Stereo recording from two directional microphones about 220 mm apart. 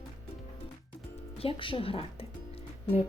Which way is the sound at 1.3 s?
25° left (ahead or behind).